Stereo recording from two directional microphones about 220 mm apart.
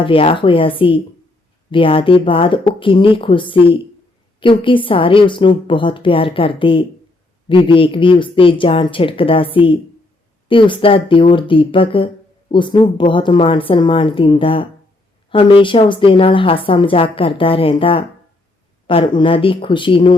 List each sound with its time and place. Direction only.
0.0 s speech: 25° left (ahead or behind)